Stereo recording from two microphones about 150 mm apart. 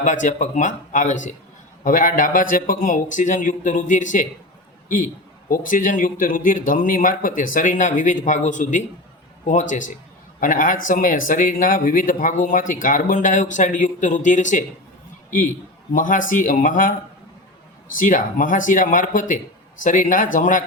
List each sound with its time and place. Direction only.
0.0 s a man's voice: 55° left (ahead or behind)
5.5 s a man's voice: 60° left (ahead or behind)
15.9 s a man's voice: 60° left (ahead or behind)
17.9 s a man's voice: 65° left (ahead or behind)